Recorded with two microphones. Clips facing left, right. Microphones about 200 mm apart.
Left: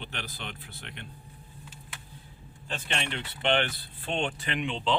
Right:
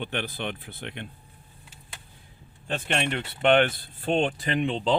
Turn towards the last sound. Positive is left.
turn(degrees=-40)  # may be behind; listen again after turning